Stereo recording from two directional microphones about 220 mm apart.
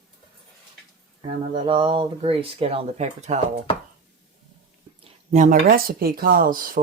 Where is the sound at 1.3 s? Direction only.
25° right (ahead or behind).